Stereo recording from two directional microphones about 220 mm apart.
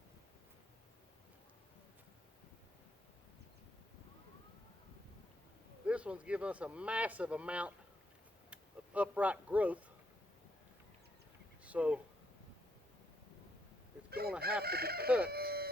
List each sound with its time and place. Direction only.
5.8 s speech: 5° right (ahead or behind)
11.6 s a sound: 5° right (ahead or behind)
14.1 s chicken: 45° right (ahead or behind)
15.3 s music: 45° right (ahead or behind)